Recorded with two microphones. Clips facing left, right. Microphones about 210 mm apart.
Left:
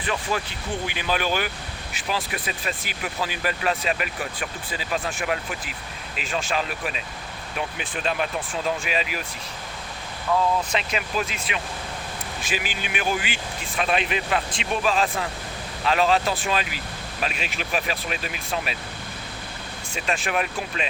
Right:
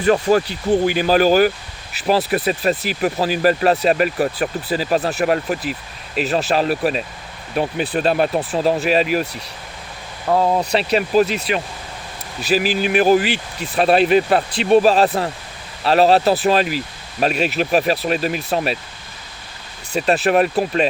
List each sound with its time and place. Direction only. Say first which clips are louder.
0.0 s speech: right 12 dB; 40° right (ahead or behind)
10.2 s speech: right 6 dB; 45° right (ahead or behind)
20.0 s speech: right 11 dB; 40° right (ahead or behind)